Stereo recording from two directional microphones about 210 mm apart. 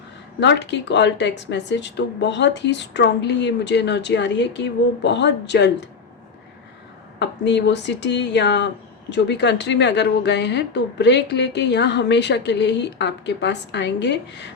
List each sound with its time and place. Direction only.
0.3 s speech: 55° left (ahead or behind)
7.2 s speech: 55° left (ahead or behind)